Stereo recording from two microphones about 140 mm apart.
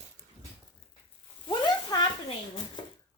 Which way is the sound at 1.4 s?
30° left (ahead or behind).